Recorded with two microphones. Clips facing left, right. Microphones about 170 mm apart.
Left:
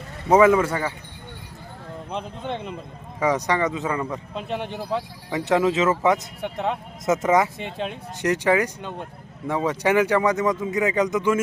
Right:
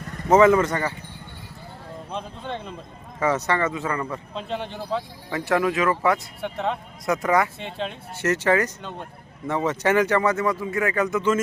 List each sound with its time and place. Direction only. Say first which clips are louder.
0.3 s a man's voice: even; 10° left (ahead or behind)
2.0 s a man's voice: left 2 dB; 15° left (ahead or behind)